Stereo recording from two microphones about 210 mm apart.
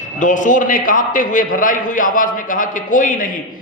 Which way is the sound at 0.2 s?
35° left (ahead or behind).